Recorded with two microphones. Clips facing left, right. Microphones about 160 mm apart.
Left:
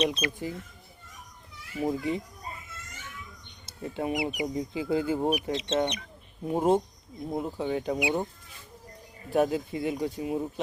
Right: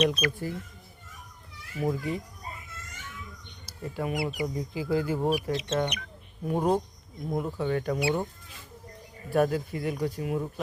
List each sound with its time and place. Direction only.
0.0 s speech: 25° left (ahead or behind)
1.9 s speech: 25° left (ahead or behind)
3.7 s speech: 25° left (ahead or behind)
9.3 s speech: 20° left (ahead or behind)